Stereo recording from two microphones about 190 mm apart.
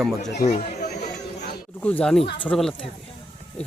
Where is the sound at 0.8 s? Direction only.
55° left (ahead or behind).